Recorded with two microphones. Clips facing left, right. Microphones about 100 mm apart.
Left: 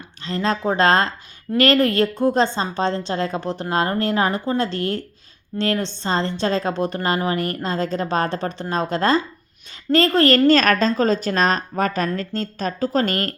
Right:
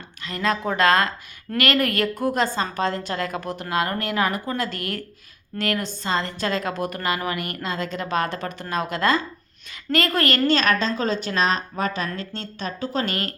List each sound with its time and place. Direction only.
0.3 s a woman's voice: 30° left (ahead or behind)